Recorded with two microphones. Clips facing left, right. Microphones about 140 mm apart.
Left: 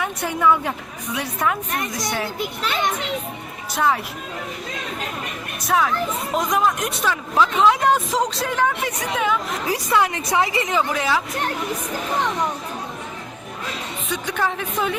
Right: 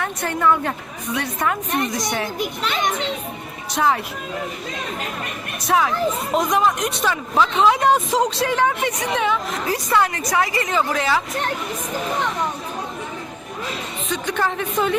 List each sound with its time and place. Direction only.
0.0 s speech: 10° left (ahead or behind)
1.7 s a woman's voice: 25° right (ahead or behind)
3.8 s speech: centre (ahead or behind)
5.6 s a woman's voice: centre (ahead or behind); by 10.8 s 20° left (ahead or behind)
10.8 s speech: 5° left (ahead or behind)
14.1 s speech: 10° left (ahead or behind)